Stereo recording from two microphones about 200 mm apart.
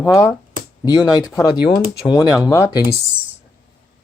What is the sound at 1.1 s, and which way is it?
Speech, 15° left (ahead or behind).